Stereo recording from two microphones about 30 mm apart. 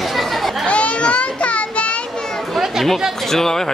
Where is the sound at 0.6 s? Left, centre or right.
Left.